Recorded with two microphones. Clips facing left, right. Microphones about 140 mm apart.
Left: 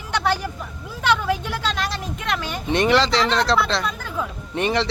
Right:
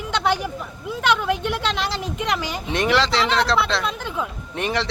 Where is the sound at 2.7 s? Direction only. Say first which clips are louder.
Left 2 dB; centre (ahead or behind).